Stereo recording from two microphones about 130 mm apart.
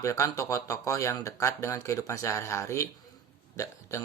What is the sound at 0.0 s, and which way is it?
Speech, 25° left (ahead or behind).